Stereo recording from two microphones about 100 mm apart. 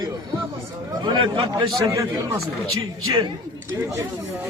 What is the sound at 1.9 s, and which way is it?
Speech, 30° right (ahead or behind).